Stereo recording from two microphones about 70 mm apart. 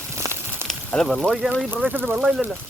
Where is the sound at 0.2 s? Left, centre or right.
Right.